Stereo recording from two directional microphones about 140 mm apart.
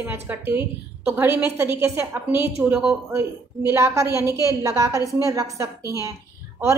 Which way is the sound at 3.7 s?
20° right (ahead or behind).